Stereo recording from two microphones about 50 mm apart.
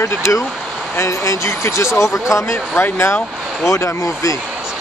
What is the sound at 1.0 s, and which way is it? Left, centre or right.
Speech, left.